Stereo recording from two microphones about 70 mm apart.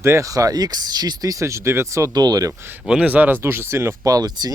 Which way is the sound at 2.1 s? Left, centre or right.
Right.